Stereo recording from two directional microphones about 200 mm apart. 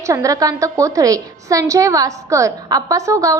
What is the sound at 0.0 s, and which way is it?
A woman's voice, 15° right (ahead or behind).